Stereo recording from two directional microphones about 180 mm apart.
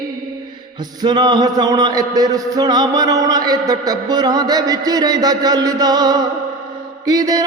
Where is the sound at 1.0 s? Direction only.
25° right (ahead or behind).